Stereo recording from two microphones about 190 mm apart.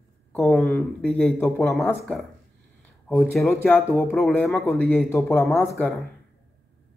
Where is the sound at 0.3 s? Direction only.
5° left (ahead or behind).